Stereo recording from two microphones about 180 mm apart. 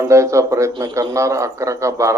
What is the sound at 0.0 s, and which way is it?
A man's voice, 15° right (ahead or behind).